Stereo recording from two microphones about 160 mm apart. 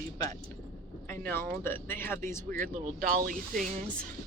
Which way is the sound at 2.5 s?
55° right (ahead or behind).